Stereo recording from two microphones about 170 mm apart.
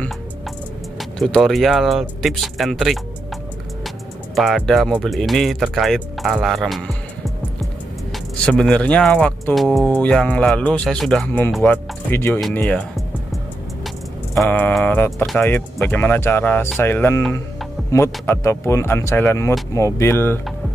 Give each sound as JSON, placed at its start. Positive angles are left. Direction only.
{"t": 1.2, "sound": "speech", "side_deg": 0}
{"t": 4.4, "sound": "speech", "side_deg": 0}
{"t": 8.5, "sound": "speech", "side_deg": 5}
{"t": 12.5, "sound": "music", "side_deg": 5}
{"t": 14.3, "sound": "speech", "side_deg": 5}